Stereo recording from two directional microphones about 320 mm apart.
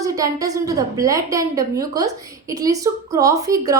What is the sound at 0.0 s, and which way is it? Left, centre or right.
A woman's voice, centre.